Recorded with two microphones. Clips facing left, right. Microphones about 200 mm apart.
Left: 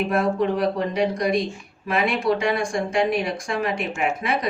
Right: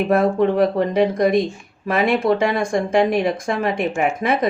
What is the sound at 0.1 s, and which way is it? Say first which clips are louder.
Speech: right 5 dB; 50° right (ahead or behind).